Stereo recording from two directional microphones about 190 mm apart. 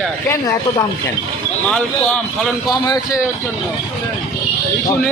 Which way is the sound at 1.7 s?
5° left (ahead or behind).